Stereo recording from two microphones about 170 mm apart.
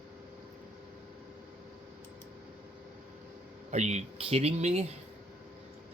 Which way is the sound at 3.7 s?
40° right (ahead or behind).